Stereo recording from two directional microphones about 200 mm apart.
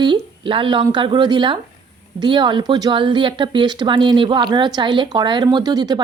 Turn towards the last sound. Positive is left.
turn(degrees=-20)  # may be behind; listen again after turning